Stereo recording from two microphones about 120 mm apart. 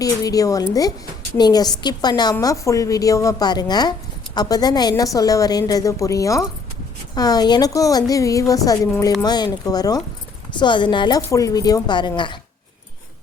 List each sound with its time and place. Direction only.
0.0 s a woman's voice: 30° left (ahead or behind)
11.2 s a woman's voice: 25° left (ahead or behind)